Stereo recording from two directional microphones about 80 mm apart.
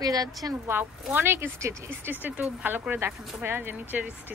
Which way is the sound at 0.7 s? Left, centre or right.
Right.